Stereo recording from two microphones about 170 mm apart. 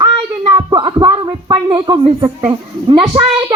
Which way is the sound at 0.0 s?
25° right (ahead or behind).